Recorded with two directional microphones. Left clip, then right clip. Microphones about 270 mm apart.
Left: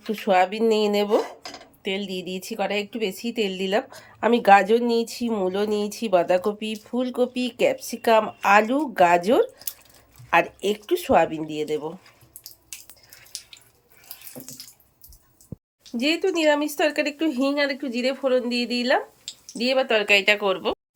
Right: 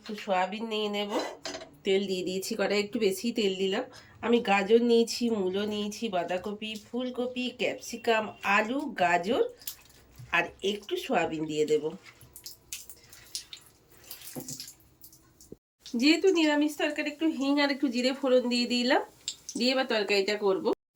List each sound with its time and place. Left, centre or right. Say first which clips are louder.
0.1 s speech: left 9 dB; left
1.4 s speech: even; centre
15.8 s speech: left 1 dB; centre
20.1 s speech: left 9 dB; left